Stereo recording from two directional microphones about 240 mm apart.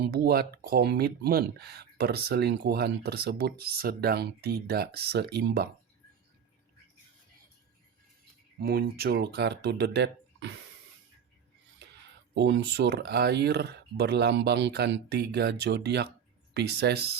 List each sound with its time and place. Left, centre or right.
0.1 s speech: right
8.6 s speech: right
12.3 s speech: right